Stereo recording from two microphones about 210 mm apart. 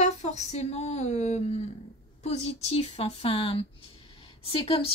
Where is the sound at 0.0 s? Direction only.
35° left (ahead or behind).